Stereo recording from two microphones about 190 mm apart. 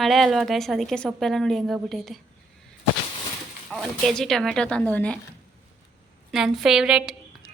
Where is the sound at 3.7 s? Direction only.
Centre (ahead or behind).